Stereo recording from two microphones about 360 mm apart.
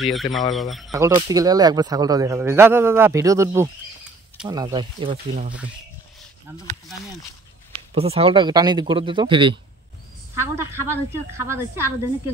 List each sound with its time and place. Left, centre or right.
0.0 s speech: centre
5.1 s speech: right
7.9 s speech: centre